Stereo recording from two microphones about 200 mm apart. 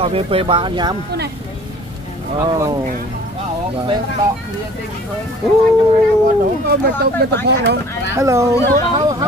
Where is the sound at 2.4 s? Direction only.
15° right (ahead or behind).